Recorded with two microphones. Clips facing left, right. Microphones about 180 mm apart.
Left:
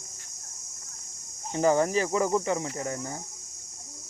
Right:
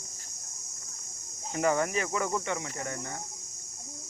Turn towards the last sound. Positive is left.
turn(degrees=10)  # may be behind; listen again after turning